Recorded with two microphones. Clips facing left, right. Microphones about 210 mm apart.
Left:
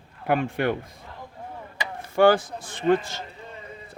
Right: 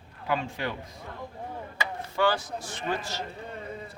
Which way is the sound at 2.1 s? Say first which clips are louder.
Left 9 dB; 50° left (ahead or behind).